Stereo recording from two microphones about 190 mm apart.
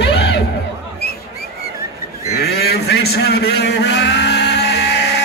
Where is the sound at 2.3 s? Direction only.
60° left (ahead or behind).